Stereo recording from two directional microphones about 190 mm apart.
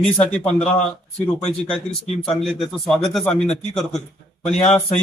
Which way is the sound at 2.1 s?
Centre (ahead or behind).